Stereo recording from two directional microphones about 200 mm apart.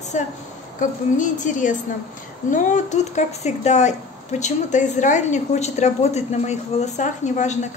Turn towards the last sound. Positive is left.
turn(degrees=35)  # may be behind; listen again after turning